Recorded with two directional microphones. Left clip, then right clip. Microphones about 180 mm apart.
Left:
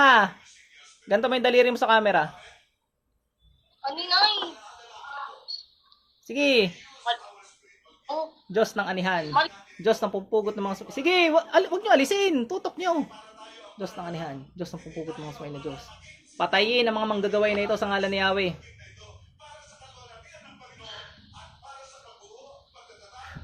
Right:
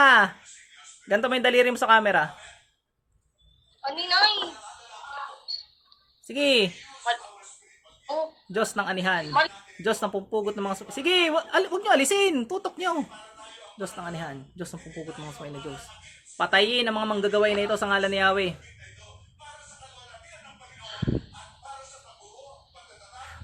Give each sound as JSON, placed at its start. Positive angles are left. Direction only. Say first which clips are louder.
{"t": 0.0, "sound": "a sound", "louder": "right 1 dB", "side_deg": -20}
{"t": 1.0, "sound": "speech", "louder": "even", "side_deg": -20}
{"t": 4.0, "sound": "a sound", "louder": "right 1 dB", "side_deg": -40}
{"t": 5.0, "sound": "music", "louder": "even", "side_deg": -10}
{"t": 6.2, "sound": "speech", "louder": "even", "side_deg": -20}
{"t": 8.0, "sound": "speech", "louder": "right 1 dB", "side_deg": -10}
{"t": 16.4, "sound": "speech", "louder": "even", "side_deg": -15}